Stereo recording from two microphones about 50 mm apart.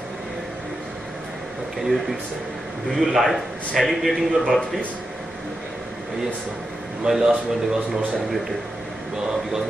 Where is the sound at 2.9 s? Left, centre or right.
Centre.